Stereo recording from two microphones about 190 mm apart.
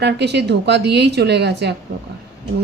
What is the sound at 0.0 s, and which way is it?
A woman's voice, 65° right (ahead or behind).